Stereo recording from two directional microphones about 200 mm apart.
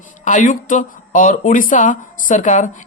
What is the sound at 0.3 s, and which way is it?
Speech, 40° left (ahead or behind).